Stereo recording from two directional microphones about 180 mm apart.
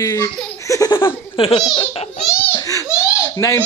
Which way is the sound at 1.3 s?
30° left (ahead or behind).